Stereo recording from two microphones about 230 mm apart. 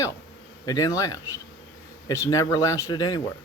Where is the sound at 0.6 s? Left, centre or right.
Centre.